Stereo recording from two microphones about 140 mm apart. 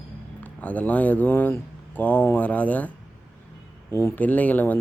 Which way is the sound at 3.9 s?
15° left (ahead or behind).